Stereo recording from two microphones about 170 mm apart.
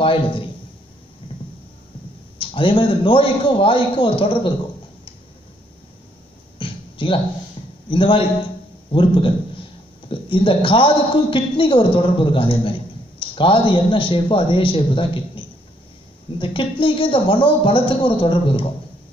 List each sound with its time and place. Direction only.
0.0 s a man's voice: 30° left (ahead or behind)
2.3 s a man's voice: 30° left (ahead or behind)
6.6 s a sound: 30° left (ahead or behind)
7.9 s a man's voice: 30° left (ahead or behind)